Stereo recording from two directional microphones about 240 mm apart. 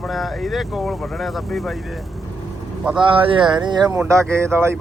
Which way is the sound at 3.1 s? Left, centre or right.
Right.